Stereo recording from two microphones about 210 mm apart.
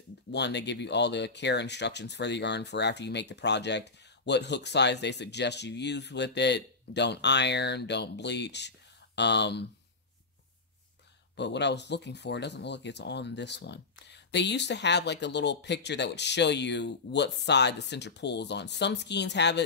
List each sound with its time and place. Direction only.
0.3 s speech: 55° left (ahead or behind)
11.3 s speech: 55° left (ahead or behind)